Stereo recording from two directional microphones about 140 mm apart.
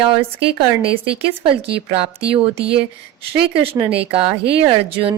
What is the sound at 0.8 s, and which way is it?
Speech, 40° right (ahead or behind).